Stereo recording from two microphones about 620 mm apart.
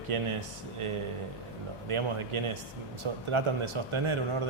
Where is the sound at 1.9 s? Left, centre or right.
Right.